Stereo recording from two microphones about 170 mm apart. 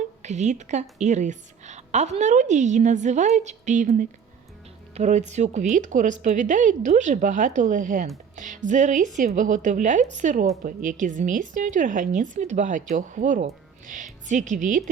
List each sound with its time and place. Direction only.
0.2 s a woman's voice: 45° right (ahead or behind)